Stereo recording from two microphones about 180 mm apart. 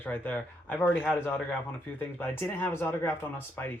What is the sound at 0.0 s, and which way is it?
Speech, 10° left (ahead or behind).